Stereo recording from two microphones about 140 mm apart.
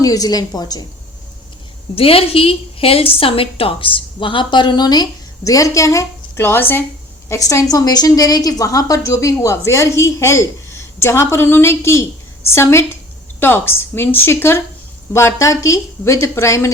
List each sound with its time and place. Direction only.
0.0 s a woman's voice: 25° left (ahead or behind)
2.0 s a woman's voice: 45° left (ahead or behind); by 16.7 s 20° left (ahead or behind)